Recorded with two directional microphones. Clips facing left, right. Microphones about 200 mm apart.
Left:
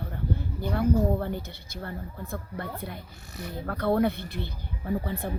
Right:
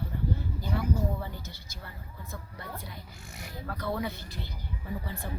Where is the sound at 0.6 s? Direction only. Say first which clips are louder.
Left 8 dB; 60° left (ahead or behind).